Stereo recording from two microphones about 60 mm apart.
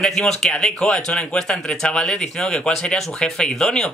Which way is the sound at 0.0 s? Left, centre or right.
Centre.